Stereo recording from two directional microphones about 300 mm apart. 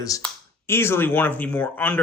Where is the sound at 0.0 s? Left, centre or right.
Centre.